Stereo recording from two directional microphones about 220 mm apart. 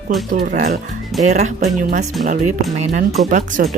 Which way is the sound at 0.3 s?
35° right (ahead or behind).